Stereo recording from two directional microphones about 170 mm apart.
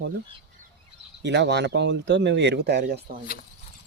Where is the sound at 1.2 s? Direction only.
90° right; by 3.0 s 75° right (ahead or behind).